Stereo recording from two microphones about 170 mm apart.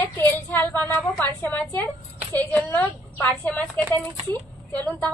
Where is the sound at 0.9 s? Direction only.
10° left (ahead or behind).